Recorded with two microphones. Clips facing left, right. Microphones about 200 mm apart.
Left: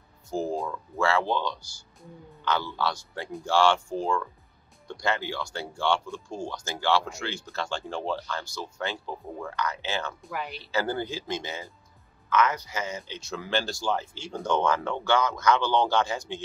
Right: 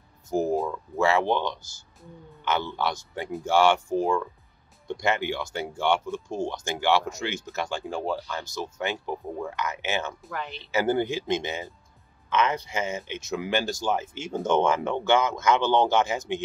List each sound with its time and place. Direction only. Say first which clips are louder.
0.3 s music: right 4 dB; 20° right (ahead or behind)
0.9 s speech: right 3 dB; 20° right (ahead or behind)